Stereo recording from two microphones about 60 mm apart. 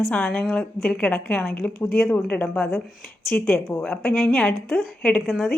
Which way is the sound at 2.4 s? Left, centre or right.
Left.